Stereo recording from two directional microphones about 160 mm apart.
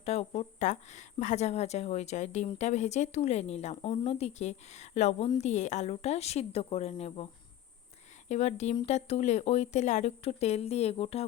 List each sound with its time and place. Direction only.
0.0 s speech: 40° left (ahead or behind)
8.3 s speech: 45° left (ahead or behind)